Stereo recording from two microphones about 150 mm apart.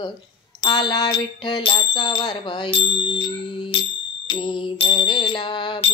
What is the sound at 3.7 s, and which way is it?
Music, 35° left (ahead or behind).